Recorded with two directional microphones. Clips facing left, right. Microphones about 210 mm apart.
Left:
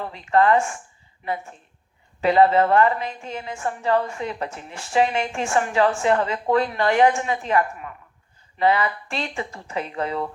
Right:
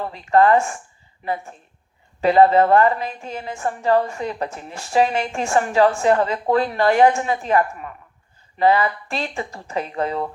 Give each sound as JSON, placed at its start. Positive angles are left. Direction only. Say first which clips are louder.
{"t": 0.1, "sound": "a woman's voice", "louder": "right 3 dB", "side_deg": -40}